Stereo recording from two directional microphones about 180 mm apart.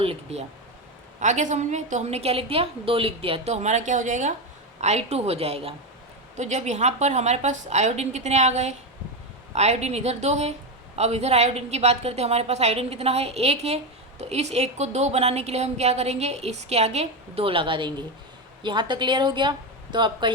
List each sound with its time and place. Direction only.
0.0 s a woman's voice: 35° right (ahead or behind)